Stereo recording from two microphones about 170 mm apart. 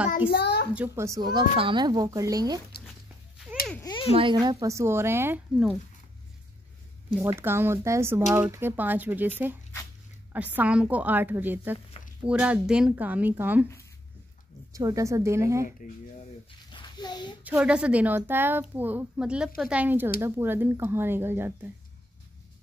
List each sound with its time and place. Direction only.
0.3 s a child's voice: 75° left (ahead or behind)
0.7 s a woman's voice: 15° right (ahead or behind)
2.9 s dog: centre (ahead or behind)
3.8 s a sound: 30° left (ahead or behind)
4.2 s a woman's voice: 25° right (ahead or behind)
7.2 s a woman's voice: 15° right (ahead or behind)
10.3 s a woman's voice: 10° right (ahead or behind)
14.7 s a woman's voice: 20° right (ahead or behind)
15.8 s speech: 50° left (ahead or behind)
16.7 s a sound: 25° left (ahead or behind)
17.4 s a woman's voice: 10° right (ahead or behind)